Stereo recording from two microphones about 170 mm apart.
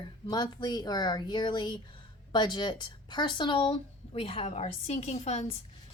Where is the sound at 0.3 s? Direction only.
25° left (ahead or behind); by 5.5 s 40° left (ahead or behind).